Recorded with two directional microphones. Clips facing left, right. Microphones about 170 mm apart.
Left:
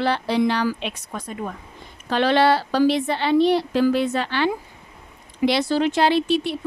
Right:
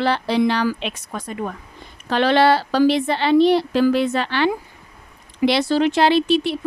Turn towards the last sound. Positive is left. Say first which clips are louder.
# right 3 dB
turn(degrees=-80)